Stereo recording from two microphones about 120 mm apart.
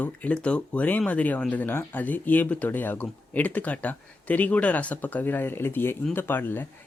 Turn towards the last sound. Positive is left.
turn(degrees=15)  # may be behind; listen again after turning